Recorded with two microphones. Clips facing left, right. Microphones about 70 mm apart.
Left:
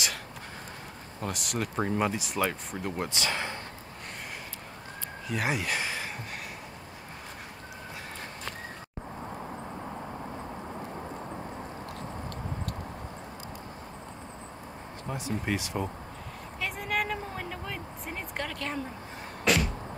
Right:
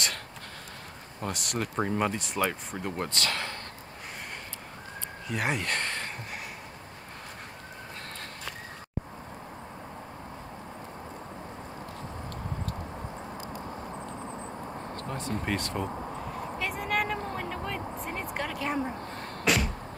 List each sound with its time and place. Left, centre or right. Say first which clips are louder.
1.2 s speech: even; centre
3.1 s speech: even; centre
5.3 s speech: even; centre
15.0 s speech: left 1 dB; centre
16.3 s vehicle: right 1 dB; centre
19.4 s music: left 1 dB; centre